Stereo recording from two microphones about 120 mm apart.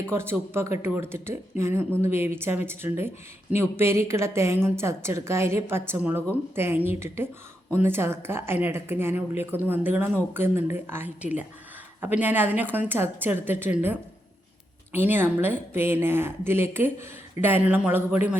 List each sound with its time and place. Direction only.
0.1 s speech: 20° right (ahead or behind)